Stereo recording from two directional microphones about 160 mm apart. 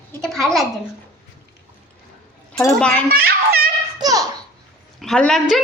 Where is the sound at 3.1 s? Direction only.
70° right (ahead or behind).